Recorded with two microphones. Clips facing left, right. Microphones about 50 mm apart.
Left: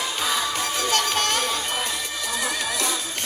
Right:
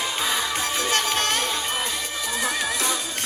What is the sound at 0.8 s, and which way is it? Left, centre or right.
Music, right.